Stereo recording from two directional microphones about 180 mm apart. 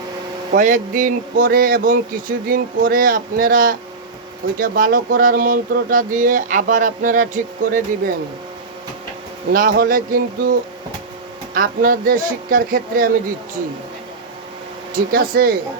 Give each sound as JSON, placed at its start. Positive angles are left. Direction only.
{"t": 0.5, "sound": "speech", "side_deg": -45}
{"t": 9.5, "sound": "speech", "side_deg": -50}
{"t": 11.5, "sound": "speech", "side_deg": -50}
{"t": 14.9, "sound": "speech", "side_deg": -55}